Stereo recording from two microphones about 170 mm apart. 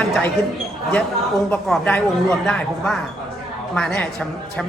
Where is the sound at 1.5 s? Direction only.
5° left (ahead or behind).